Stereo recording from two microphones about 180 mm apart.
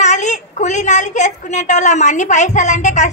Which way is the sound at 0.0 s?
40° left (ahead or behind).